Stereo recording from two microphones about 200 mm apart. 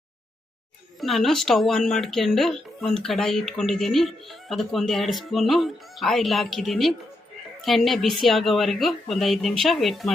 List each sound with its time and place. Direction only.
0.9 s speech: centre (ahead or behind)